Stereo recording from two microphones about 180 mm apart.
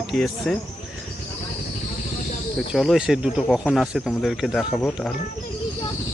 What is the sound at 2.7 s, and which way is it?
Speech, centre (ahead or behind).